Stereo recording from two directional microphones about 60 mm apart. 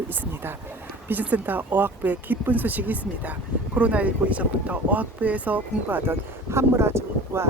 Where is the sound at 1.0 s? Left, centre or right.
Right.